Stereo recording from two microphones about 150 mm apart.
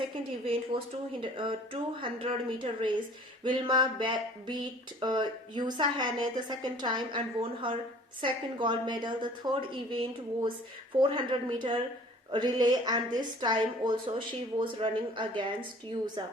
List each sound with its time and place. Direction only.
0.0 s speech: 35° right (ahead or behind)